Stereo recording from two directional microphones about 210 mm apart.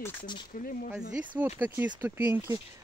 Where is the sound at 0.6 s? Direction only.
45° left (ahead or behind).